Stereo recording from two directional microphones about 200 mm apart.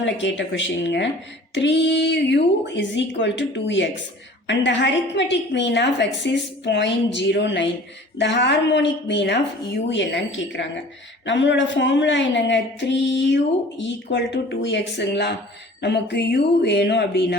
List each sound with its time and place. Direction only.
0.0 s a woman's voice: 70° left (ahead or behind)